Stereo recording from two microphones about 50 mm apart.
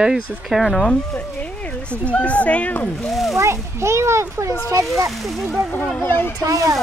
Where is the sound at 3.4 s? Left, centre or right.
Right.